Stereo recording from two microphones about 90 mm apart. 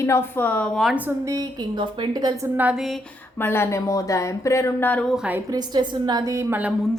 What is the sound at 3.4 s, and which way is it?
Speech, 25° left (ahead or behind).